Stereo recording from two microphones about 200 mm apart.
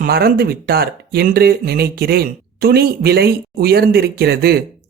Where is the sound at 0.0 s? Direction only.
45° right (ahead or behind).